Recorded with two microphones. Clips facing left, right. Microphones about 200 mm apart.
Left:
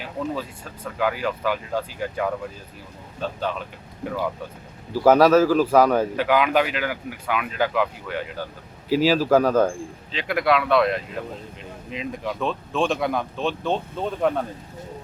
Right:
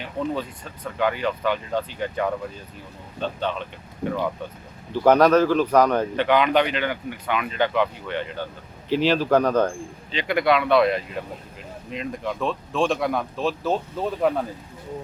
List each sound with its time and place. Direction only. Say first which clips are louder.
0.0 s speech: right 1 dB; 5° left (ahead or behind)
4.9 s speech: left 1 dB; 5° left (ahead or behind)